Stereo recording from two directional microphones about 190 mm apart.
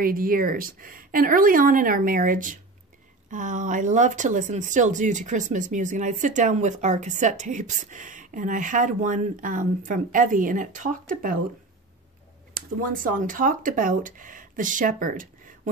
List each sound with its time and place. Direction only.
0.0 s speech: 50° right (ahead or behind)
12.5 s speech: 45° right (ahead or behind)